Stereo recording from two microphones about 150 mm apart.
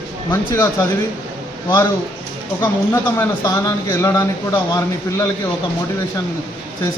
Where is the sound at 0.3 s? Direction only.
15° left (ahead or behind).